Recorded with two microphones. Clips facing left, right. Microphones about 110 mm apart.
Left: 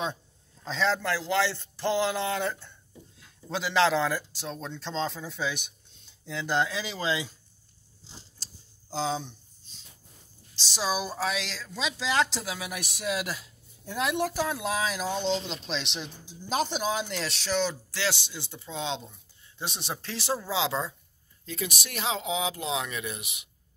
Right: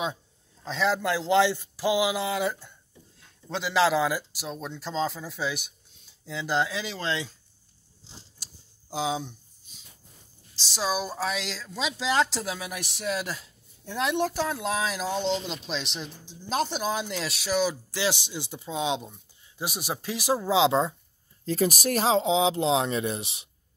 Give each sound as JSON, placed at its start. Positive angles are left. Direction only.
{"t": 0.7, "sound": "speech", "side_deg": -5}
{"t": 8.4, "sound": "tick-tock", "side_deg": -10}
{"t": 8.9, "sound": "a sound", "side_deg": -10}
{"t": 10.5, "sound": "speech", "side_deg": 0}
{"t": 21.5, "sound": "speech", "side_deg": -40}